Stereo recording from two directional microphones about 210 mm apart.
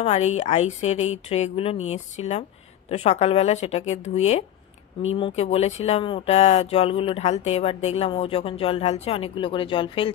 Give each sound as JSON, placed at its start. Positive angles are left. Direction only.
{"t": 0.0, "sound": "a woman's voice", "side_deg": 30}